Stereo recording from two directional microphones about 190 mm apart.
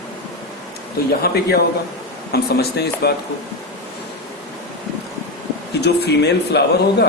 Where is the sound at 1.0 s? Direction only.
50° left (ahead or behind).